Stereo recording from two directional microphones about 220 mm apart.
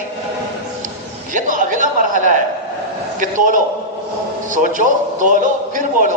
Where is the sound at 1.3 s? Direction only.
35° right (ahead or behind).